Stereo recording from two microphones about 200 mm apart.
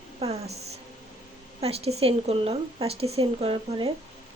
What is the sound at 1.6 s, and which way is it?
A woman's voice, 30° right (ahead or behind).